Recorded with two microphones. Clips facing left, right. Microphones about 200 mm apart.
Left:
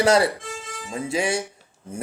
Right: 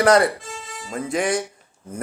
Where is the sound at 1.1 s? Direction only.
25° left (ahead or behind).